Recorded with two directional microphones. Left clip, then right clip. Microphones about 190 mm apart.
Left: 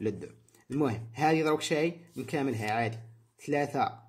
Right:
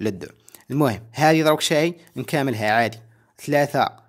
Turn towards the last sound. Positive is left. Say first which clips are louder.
# right 10 dB
turn(degrees=-40)  # may be behind; listen again after turning